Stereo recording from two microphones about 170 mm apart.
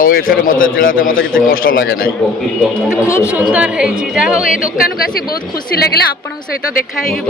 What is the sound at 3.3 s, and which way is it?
A woman's voice, 10° right (ahead or behind).